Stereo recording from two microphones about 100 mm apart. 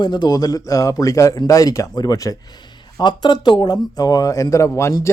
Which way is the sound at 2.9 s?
50° left (ahead or behind).